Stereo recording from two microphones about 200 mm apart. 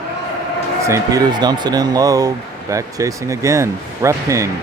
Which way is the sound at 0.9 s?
20° right (ahead or behind).